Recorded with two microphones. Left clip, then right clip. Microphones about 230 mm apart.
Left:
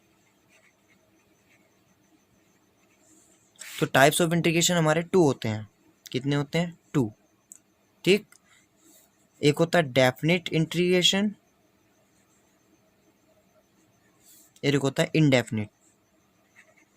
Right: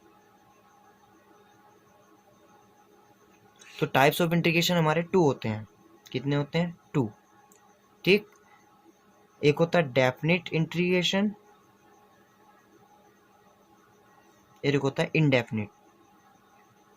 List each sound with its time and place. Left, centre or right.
3.8 s speech: left
9.4 s speech: left
14.6 s speech: left